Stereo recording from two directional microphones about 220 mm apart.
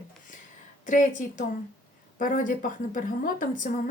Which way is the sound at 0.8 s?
35° left (ahead or behind).